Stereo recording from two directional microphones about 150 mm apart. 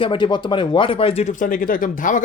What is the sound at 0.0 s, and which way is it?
Speech, 35° left (ahead or behind).